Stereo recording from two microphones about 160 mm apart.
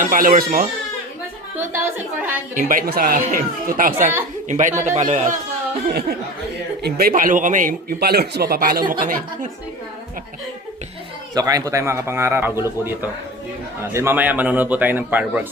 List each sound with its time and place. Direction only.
0.0 s speech: 55° right (ahead or behind)
1.5 s speech: 15° right (ahead or behind)
2.6 s speech: 60° right (ahead or behind)
4.4 s a man's voice: 50° right (ahead or behind)
5.9 s speech: 75° right (ahead or behind); by 7.8 s 55° right (ahead or behind)
7.9 s speech: 75° right (ahead or behind); by 9.5 s 60° right (ahead or behind)
11.3 s speech: 20° right (ahead or behind)